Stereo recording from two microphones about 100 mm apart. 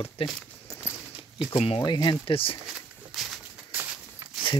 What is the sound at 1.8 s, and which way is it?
Speech, 45° left (ahead or behind).